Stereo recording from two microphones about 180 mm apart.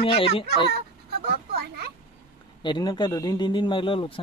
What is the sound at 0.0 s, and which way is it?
Speech, 30° left (ahead or behind).